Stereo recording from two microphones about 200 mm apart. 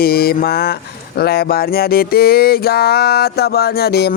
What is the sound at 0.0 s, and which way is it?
Speech, 50° left (ahead or behind).